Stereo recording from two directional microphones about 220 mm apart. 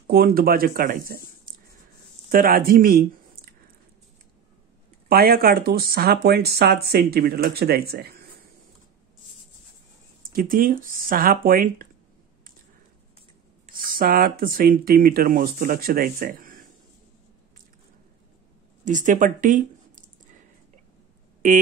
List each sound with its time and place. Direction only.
0.0 s speech: 45° right (ahead or behind)
5.0 s speech: 40° right (ahead or behind)
10.2 s speech: 40° right (ahead or behind)
13.7 s speech: 40° right (ahead or behind)
18.9 s speech: 35° right (ahead or behind)